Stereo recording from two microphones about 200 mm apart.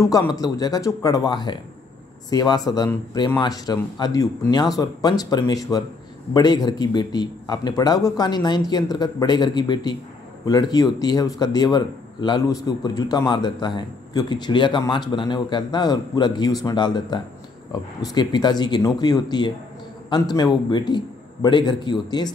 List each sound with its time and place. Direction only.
0.0 s speech: 15° left (ahead or behind)